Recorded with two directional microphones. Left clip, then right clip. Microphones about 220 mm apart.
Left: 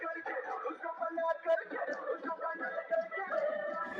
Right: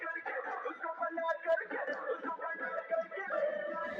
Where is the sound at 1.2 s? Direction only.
10° right (ahead or behind).